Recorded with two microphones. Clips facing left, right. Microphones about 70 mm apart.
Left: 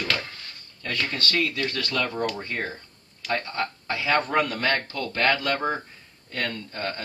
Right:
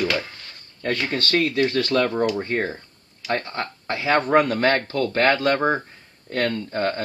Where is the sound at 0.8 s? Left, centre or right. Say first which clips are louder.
Right 4 dB; right.